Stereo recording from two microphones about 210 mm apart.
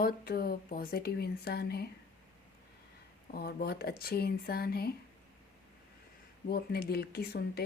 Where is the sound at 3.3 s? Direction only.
50° left (ahead or behind).